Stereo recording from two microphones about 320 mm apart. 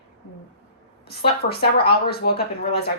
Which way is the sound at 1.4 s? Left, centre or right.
Left.